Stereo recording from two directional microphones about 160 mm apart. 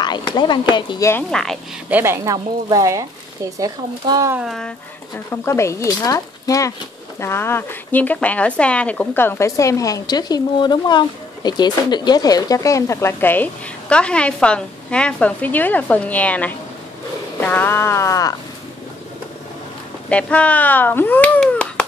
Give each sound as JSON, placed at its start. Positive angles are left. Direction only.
{"t": 0.0, "sound": "speech", "side_deg": 30}
{"t": 1.3, "sound": "speech", "side_deg": 5}
{"t": 1.9, "sound": "speech", "side_deg": -15}
{"t": 4.3, "sound": "speech", "side_deg": -5}
{"t": 5.3, "sound": "speech", "side_deg": 15}
{"t": 20.1, "sound": "speech", "side_deg": 10}